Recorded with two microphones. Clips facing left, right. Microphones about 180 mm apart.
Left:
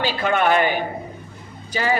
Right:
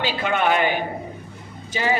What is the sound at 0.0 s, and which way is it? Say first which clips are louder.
Speech: left 2 dB; 40° left (ahead or behind).